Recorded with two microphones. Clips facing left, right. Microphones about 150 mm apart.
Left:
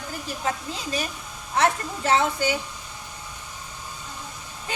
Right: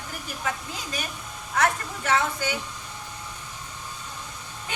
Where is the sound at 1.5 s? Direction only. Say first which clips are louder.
Left 2 dB; 25° left (ahead or behind).